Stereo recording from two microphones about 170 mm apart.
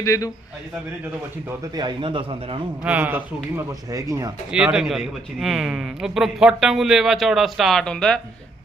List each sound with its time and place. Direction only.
0.0 s a man's voice: 20° left (ahead or behind)
1.7 s a man's voice: 25° right (ahead or behind)
2.8 s a man's voice: 10° right (ahead or behind)
4.5 s a man's voice: 5° right (ahead or behind)